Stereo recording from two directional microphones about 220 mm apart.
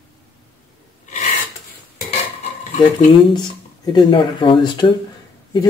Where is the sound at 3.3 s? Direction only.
20° left (ahead or behind).